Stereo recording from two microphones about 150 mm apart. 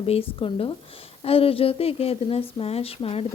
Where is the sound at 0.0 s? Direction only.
40° left (ahead or behind).